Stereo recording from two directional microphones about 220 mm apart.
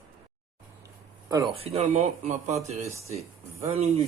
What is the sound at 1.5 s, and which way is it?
Speech, 25° right (ahead or behind).